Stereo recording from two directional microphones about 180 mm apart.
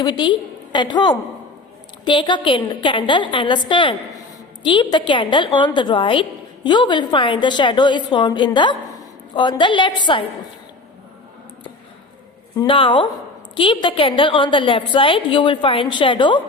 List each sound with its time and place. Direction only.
0.0 s a woman's voice: 25° left (ahead or behind)
12.5 s a woman's voice: 30° left (ahead or behind)